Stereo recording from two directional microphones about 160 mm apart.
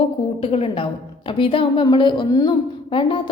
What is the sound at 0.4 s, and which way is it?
A woman's voice, 35° left (ahead or behind).